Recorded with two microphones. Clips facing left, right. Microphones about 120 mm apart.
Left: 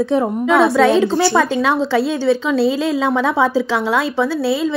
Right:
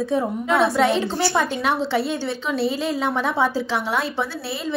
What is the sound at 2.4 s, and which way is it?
A woman's voice, 90° left.